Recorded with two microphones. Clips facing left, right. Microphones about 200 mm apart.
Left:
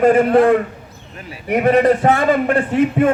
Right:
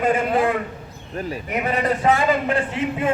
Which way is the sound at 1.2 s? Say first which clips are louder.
Right 8 dB; 40° right (ahead or behind).